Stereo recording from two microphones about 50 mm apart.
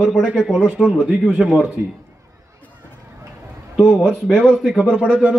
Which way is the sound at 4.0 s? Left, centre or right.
Centre.